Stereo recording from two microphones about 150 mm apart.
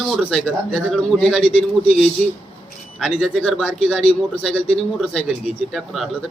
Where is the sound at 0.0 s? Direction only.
Centre (ahead or behind).